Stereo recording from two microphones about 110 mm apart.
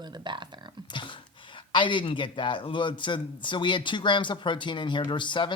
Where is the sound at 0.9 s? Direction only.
45° left (ahead or behind).